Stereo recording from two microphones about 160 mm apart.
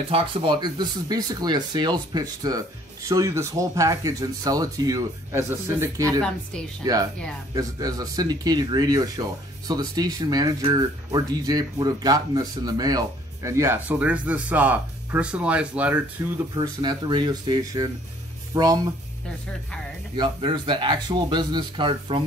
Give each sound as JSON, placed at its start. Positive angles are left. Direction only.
{"t": 0.1, "sound": "speech", "side_deg": -30}
{"t": 16.5, "sound": "speech", "side_deg": -25}
{"t": 20.2, "sound": "speech", "side_deg": -30}